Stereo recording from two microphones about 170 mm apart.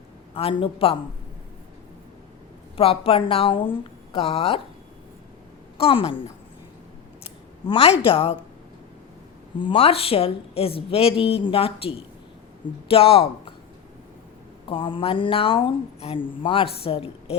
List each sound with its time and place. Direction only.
0.3 s speech: 35° left (ahead or behind)
2.7 s speech: 35° left (ahead or behind)
5.7 s speech: 35° left (ahead or behind)
7.7 s speech: 35° left (ahead or behind)
9.6 s speech: 30° left (ahead or behind)
14.7 s speech: 30° left (ahead or behind)